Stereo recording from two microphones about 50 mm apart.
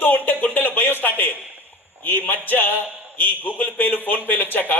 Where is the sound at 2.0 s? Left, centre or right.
Left.